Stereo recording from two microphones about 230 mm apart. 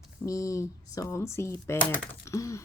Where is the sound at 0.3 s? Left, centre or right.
Centre.